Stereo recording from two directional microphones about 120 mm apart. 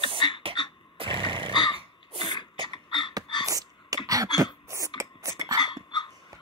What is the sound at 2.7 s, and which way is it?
Beatboxing, 40° left (ahead or behind).